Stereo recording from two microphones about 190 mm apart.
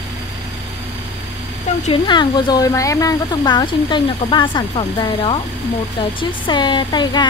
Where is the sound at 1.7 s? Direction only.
40° left (ahead or behind).